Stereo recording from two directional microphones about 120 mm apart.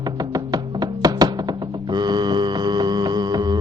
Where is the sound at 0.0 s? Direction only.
35° right (ahead or behind).